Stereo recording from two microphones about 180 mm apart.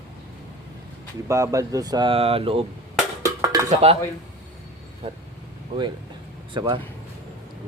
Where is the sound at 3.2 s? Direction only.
20° right (ahead or behind).